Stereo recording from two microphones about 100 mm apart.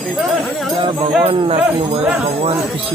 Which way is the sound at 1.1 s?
75° right (ahead or behind).